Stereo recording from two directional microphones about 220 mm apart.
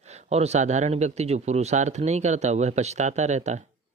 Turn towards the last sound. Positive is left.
turn(degrees=-30)  # may be behind; listen again after turning